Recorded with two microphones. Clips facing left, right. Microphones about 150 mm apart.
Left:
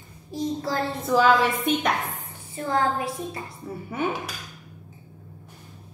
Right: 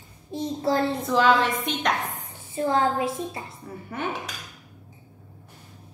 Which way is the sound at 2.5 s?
25° right (ahead or behind).